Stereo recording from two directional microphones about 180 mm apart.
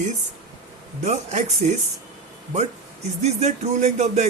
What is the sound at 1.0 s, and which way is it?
Music, 40° right (ahead or behind).